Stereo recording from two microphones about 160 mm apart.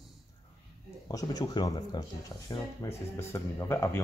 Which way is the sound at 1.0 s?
25° left (ahead or behind).